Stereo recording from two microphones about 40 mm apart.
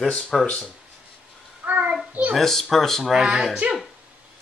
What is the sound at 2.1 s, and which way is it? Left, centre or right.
Speech, right.